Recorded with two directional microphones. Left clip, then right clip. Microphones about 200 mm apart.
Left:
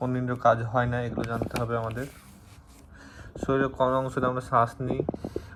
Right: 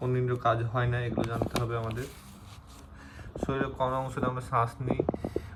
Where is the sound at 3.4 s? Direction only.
20° left (ahead or behind).